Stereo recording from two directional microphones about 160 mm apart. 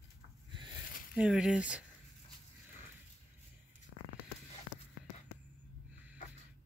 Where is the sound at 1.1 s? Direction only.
5° right (ahead or behind).